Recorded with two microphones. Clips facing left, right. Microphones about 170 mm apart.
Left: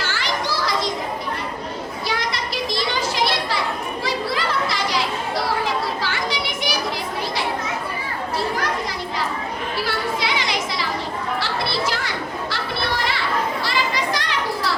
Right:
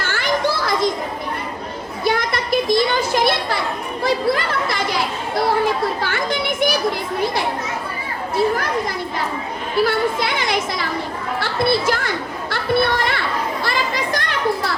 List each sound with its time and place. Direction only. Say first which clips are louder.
0.0 s children playing: right 5 dB; 55° right (ahead or behind)
2.0 s children playing: right 8 dB; 55° right (ahead or behind)
4.0 s chatter: right 7 dB; 55° right (ahead or behind)
6.0 s children playing: right 3 dB; 50° right (ahead or behind)
9.8 s children playing: right 6 dB; 50° right (ahead or behind)